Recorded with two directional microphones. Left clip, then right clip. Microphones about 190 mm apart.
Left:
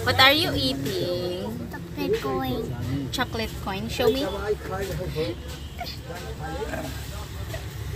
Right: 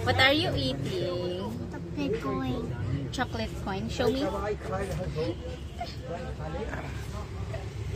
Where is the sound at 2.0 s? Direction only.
5° right (ahead or behind).